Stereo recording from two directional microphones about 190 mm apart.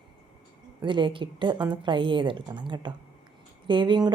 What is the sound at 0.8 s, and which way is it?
A woman's voice, 25° right (ahead or behind).